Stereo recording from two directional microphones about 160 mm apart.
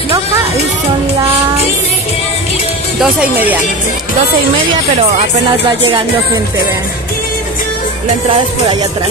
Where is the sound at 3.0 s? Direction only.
10° right (ahead or behind).